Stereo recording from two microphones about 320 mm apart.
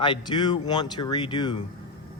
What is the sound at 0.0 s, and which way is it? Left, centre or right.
Speech, centre.